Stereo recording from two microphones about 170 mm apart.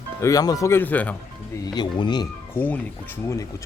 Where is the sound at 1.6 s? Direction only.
25° left (ahead or behind).